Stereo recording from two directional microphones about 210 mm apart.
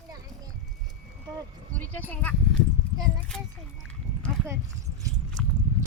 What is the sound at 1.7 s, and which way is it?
Speech, 10° left (ahead or behind).